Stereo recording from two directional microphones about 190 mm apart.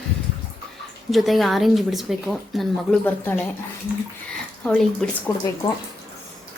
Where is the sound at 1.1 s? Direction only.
Centre (ahead or behind).